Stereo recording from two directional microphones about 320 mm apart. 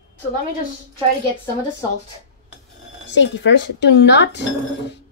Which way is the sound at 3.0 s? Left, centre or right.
Left.